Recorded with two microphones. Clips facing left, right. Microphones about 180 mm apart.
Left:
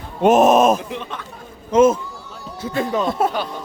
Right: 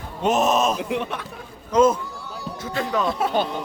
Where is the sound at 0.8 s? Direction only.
65° right (ahead or behind).